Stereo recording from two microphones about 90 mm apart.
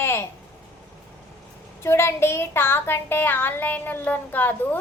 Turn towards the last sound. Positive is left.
turn(degrees=20)  # may be behind; listen again after turning